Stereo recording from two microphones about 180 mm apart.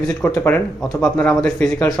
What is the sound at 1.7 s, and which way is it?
Speech, 20° left (ahead or behind).